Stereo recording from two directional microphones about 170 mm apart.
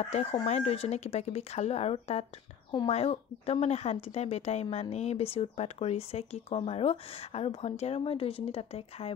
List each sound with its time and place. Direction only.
0.0 s speech: 40° left (ahead or behind)